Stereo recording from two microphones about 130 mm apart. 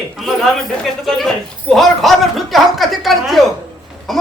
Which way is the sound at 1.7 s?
Centre (ahead or behind).